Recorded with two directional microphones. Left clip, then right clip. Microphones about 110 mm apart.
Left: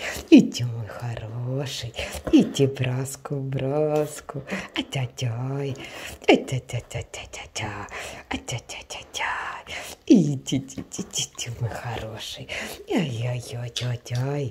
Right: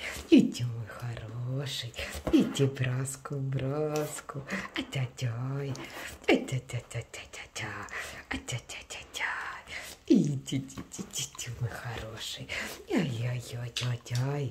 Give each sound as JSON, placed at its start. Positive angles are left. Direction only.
{"t": 0.0, "sound": "speech", "side_deg": 60}
{"t": 9.1, "sound": "speech", "side_deg": 55}
{"t": 12.2, "sound": "speech", "side_deg": 20}